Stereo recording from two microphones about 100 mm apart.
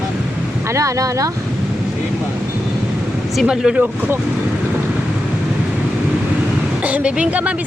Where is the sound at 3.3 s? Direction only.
5° right (ahead or behind).